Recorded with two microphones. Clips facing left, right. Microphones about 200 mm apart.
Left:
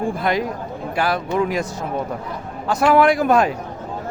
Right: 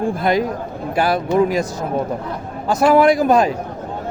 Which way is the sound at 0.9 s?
40° right (ahead or behind).